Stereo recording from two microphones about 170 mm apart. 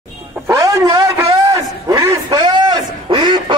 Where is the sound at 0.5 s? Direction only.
20° right (ahead or behind).